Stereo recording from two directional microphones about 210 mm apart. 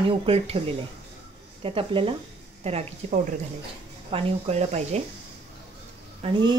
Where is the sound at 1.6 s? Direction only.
25° right (ahead or behind).